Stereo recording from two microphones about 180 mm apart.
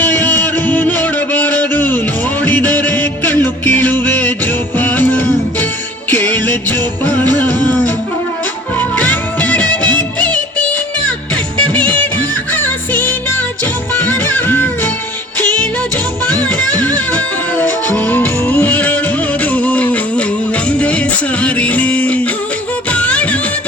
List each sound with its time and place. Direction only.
0.0 s music: 10° left (ahead or behind)
8.8 s music of bollywood: 10° left (ahead or behind)
11.5 s music: 5° left (ahead or behind)